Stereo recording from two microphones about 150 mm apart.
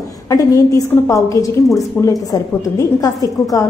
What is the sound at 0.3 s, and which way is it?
A woman's voice, 20° left (ahead or behind).